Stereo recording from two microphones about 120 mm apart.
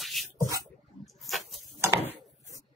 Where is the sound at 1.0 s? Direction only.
Centre (ahead or behind).